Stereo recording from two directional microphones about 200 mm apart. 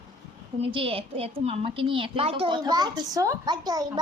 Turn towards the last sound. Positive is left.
turn(degrees=-20)  # may be behind; listen again after turning